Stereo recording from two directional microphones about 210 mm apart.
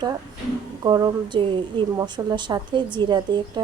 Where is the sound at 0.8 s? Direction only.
20° right (ahead or behind).